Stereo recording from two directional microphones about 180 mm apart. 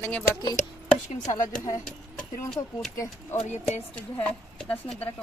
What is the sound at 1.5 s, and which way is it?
Speech, 45° left (ahead or behind).